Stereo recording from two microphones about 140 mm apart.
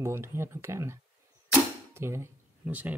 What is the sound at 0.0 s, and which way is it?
Speech, 20° right (ahead or behind).